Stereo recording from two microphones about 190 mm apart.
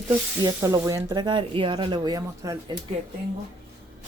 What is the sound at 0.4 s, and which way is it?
Speech, 15° right (ahead or behind).